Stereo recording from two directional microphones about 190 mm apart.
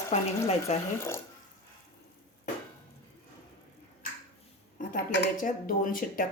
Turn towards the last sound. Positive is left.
turn(degrees=45)  # may be behind; listen again after turning